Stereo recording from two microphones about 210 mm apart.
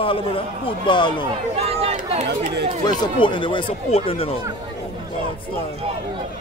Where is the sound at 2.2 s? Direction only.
55° right (ahead or behind).